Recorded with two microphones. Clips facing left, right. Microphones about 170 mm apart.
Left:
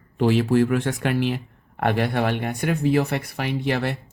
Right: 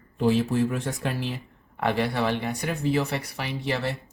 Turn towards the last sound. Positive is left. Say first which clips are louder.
# left 4 dB
turn(degrees=60)  # may be behind; listen again after turning